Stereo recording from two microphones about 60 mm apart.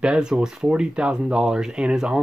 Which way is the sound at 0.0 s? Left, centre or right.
Centre.